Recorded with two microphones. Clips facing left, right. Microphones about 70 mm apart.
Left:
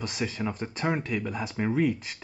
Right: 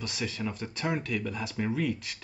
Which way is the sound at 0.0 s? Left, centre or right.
Left.